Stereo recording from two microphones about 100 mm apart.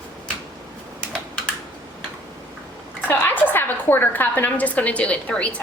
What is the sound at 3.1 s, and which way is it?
A woman's voice, 20° left (ahead or behind).